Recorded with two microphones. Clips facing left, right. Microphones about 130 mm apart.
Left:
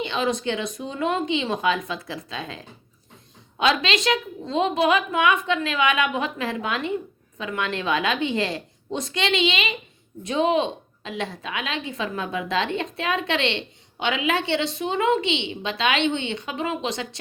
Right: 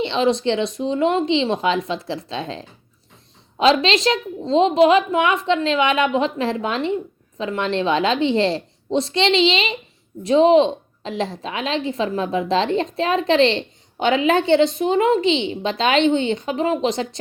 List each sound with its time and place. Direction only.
0.0 s a woman's voice: 30° right (ahead or behind)